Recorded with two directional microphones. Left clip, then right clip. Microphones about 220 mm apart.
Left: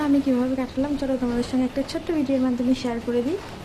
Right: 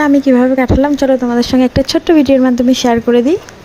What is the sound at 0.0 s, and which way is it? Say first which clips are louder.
Speech: right 12 dB; 35° right (ahead or behind).